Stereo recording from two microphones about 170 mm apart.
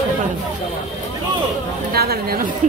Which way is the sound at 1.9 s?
65° right (ahead or behind).